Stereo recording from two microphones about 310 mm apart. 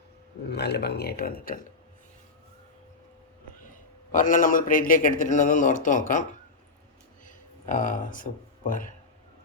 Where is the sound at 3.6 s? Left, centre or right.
Left.